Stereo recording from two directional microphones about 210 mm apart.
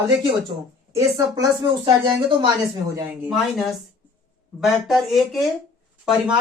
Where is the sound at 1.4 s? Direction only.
25° right (ahead or behind).